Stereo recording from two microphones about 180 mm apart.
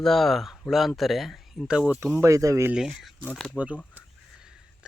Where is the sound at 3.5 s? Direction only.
10° right (ahead or behind).